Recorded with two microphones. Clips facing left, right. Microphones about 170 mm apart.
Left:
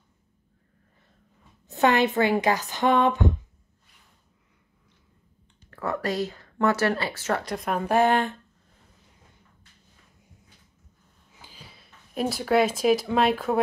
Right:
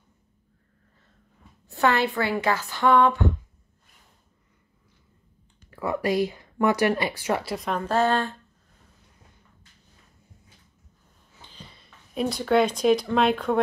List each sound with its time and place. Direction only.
1.7 s speech: 20° left (ahead or behind)
5.7 s speech: 10° right (ahead or behind)
7.5 s a woman's voice: centre (ahead or behind)
7.8 s speech: 15° left (ahead or behind)
11.3 s speech: 5° left (ahead or behind)